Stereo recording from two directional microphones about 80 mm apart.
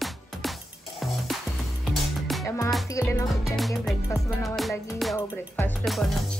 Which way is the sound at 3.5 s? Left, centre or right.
Centre.